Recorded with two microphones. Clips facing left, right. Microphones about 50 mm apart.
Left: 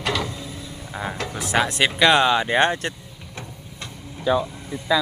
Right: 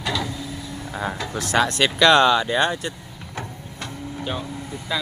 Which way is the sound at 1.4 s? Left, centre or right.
Centre.